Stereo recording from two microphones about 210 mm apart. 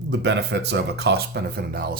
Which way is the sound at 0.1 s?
55° right (ahead or behind).